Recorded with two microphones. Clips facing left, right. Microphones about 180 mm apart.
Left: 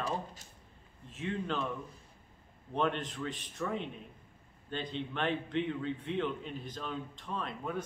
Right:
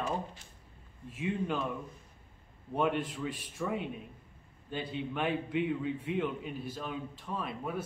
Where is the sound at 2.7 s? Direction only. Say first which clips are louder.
Right 2 dB; 10° right (ahead or behind).